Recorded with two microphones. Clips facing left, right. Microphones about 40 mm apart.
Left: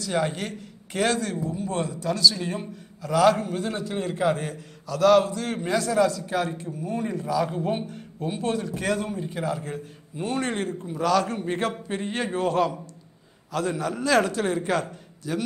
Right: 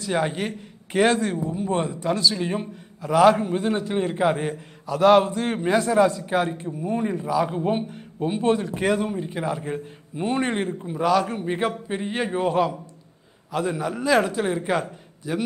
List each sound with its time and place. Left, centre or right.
0.0 s a man's voice: right